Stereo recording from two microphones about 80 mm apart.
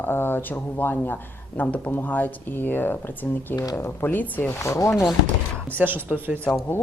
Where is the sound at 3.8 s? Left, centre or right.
Left.